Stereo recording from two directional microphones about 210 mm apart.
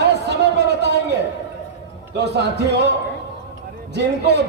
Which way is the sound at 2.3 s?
55° right (ahead or behind).